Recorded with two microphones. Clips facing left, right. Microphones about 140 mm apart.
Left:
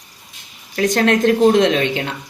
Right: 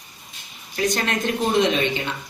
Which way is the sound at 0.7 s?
75° left (ahead or behind).